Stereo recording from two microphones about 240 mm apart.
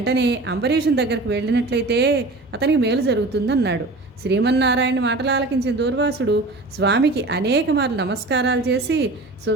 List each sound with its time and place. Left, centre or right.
0.0 s speech: right